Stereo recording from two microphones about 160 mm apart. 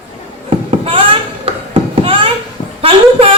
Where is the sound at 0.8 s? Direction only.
35° right (ahead or behind).